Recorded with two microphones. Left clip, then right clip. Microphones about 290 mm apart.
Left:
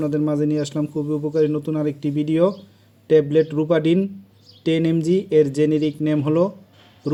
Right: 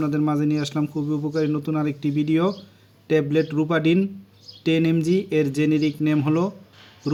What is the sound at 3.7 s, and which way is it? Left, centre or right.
Speech, centre.